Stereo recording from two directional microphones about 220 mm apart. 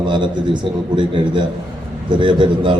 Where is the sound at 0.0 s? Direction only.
20° right (ahead or behind).